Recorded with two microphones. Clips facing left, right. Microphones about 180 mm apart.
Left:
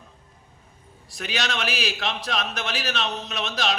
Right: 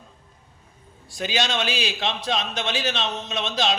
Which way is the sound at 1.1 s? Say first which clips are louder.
Right 4 dB; 30° right (ahead or behind).